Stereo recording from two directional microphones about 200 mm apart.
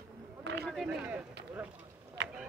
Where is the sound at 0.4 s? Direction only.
60° right (ahead or behind).